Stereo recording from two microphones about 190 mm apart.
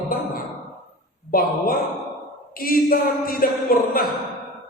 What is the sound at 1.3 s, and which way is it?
Speech, 50° left (ahead or behind).